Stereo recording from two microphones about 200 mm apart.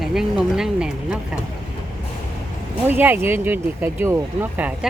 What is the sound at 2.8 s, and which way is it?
Speech, 10° right (ahead or behind).